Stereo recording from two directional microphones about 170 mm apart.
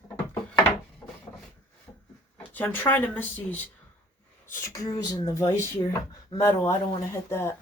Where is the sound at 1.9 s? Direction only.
20° left (ahead or behind).